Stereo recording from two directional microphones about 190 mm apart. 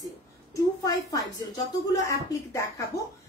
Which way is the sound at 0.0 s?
20° left (ahead or behind).